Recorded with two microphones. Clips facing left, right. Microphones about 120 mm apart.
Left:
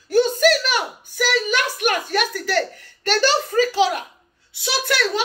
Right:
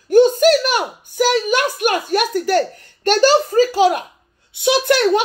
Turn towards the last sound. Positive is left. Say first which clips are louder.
# right 8 dB
turn(degrees=-55)  # may be behind; listen again after turning